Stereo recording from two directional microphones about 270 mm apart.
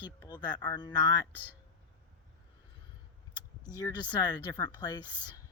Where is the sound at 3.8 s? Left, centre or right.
Centre.